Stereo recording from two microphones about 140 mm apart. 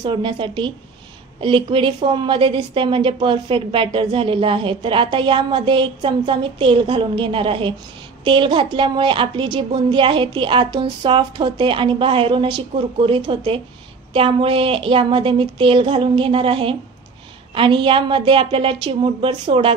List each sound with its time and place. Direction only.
0.0 s a woman's voice: 35° right (ahead or behind)